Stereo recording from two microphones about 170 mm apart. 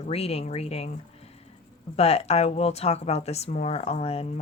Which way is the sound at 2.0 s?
35° left (ahead or behind).